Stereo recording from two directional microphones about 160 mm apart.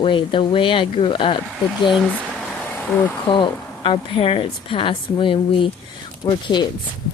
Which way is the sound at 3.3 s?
30° left (ahead or behind).